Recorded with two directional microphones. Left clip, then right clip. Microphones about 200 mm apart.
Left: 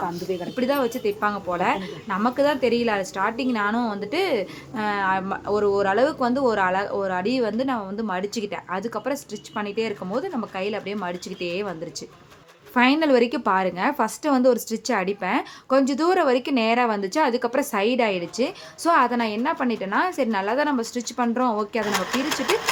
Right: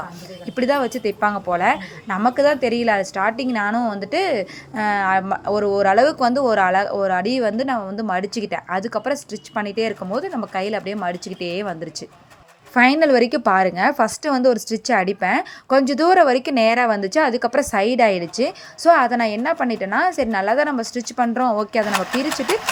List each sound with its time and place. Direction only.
0.5 s a woman's voice: 20° right (ahead or behind)